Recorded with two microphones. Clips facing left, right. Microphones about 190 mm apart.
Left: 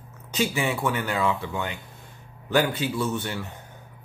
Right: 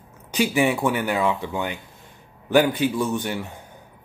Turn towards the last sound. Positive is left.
turn(degrees=-15)  # may be behind; listen again after turning